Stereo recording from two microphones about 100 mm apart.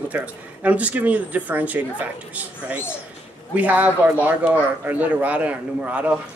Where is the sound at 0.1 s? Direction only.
15° right (ahead or behind).